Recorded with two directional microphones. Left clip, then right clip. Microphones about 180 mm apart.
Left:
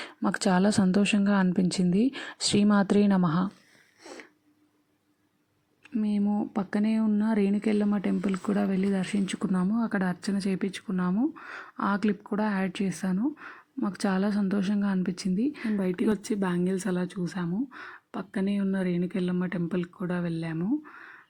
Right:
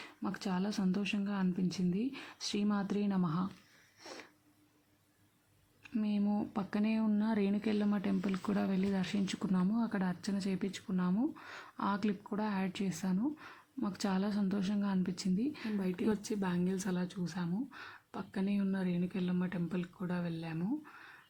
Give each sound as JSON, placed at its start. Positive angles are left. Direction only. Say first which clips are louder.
{"t": 0.0, "sound": "speech", "louder": "left 13 dB", "side_deg": 40}
{"t": 4.0, "sound": "a sound", "louder": "left 5 dB", "side_deg": 15}
{"t": 5.8, "sound": "speech", "louder": "left 7 dB", "side_deg": 20}